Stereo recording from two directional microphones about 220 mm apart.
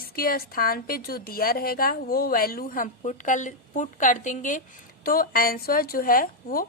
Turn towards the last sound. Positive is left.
turn(degrees=40)  # may be behind; listen again after turning